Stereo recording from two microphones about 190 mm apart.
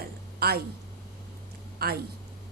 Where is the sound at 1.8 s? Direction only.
55° right (ahead or behind).